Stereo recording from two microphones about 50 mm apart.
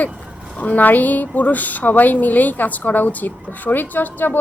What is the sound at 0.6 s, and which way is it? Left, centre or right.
A woman's voice, left.